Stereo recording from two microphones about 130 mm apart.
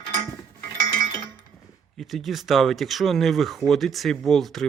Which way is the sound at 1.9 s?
Centre (ahead or behind).